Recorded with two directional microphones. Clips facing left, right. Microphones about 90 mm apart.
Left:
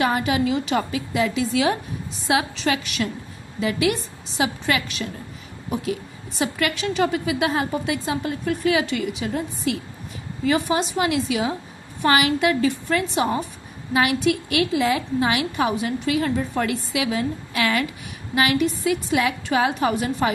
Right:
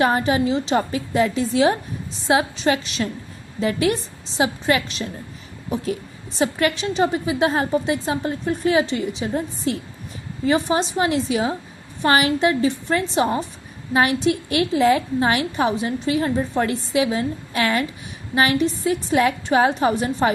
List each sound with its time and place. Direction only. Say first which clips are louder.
0.0 s a woman's voice: right 2 dB; 35° right (ahead or behind)